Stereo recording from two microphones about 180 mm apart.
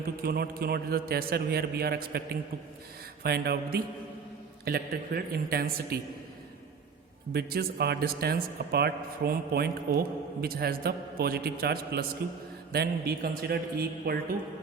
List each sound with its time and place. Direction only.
0.2 s a man's voice: 60° right (ahead or behind)
7.3 s a man's voice: 60° right (ahead or behind)